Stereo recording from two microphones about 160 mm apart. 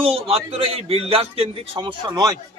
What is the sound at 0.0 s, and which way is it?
A man's voice, 35° right (ahead or behind).